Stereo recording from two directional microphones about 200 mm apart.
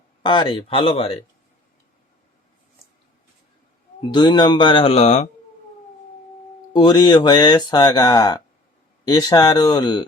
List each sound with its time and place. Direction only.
0.2 s speech: 25° left (ahead or behind)
4.1 s speech: 20° left (ahead or behind)
6.7 s speech: 20° left (ahead or behind)